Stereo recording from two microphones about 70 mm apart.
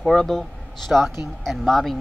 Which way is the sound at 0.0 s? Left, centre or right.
Centre.